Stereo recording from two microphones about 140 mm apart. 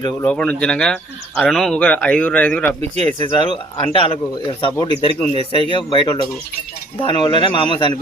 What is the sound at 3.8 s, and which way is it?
Speech, 40° left (ahead or behind).